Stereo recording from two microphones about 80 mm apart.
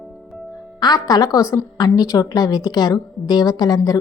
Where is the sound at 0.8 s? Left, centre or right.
Left.